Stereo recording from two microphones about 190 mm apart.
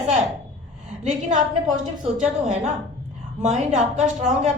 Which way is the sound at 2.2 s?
40° right (ahead or behind).